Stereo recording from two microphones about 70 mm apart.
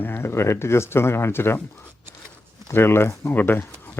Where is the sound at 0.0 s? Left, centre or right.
Left.